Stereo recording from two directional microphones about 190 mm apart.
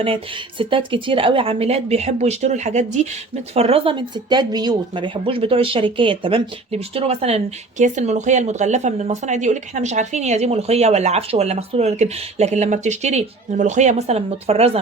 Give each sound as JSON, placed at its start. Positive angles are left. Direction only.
{"t": 0.6, "sound": "speech", "side_deg": -25}